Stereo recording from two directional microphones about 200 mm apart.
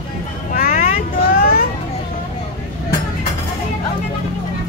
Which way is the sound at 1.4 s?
45° left (ahead or behind).